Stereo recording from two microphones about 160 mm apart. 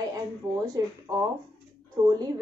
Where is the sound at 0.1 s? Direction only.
20° right (ahead or behind).